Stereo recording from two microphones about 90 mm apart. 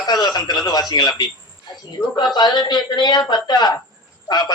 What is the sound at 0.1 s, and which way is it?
A man's voice, 50° left (ahead or behind).